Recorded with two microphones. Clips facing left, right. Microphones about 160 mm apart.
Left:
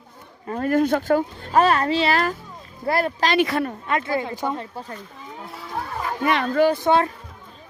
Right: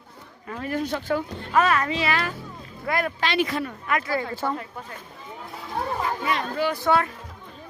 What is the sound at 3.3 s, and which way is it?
Speech, 65° left (ahead or behind).